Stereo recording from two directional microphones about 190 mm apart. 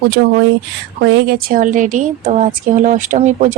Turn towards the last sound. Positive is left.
turn(degrees=-40)  # may be behind; listen again after turning